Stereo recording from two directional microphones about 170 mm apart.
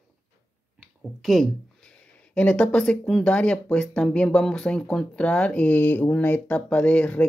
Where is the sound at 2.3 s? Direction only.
5° left (ahead or behind).